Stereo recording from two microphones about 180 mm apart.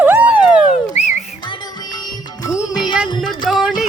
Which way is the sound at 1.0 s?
35° left (ahead or behind).